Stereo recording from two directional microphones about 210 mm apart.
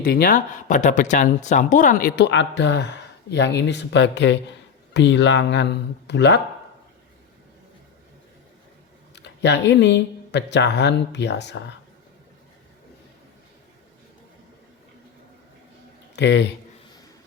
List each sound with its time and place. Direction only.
0.0 s speech: 45° left (ahead or behind)
9.1 s speech: 55° left (ahead or behind)
16.1 s speech: 55° left (ahead or behind)